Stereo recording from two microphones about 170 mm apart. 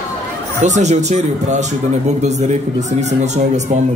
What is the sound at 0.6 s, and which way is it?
Speech, 45° right (ahead or behind).